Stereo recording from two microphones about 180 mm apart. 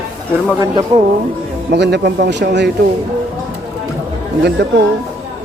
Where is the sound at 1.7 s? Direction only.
70° right (ahead or behind).